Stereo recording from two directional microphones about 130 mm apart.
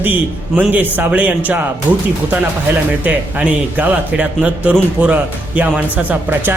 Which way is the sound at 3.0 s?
15° right (ahead or behind).